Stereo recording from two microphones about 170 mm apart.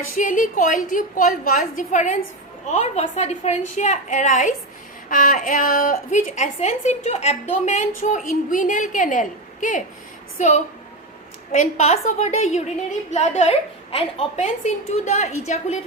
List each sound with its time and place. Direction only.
0.2 s a woman's voice: 50° left (ahead or behind)